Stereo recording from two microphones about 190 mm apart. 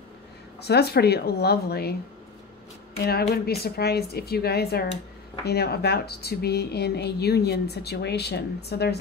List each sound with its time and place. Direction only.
0.6 s a woman's voice: 60° left (ahead or behind)
3.0 s a woman's voice: 55° left (ahead or behind)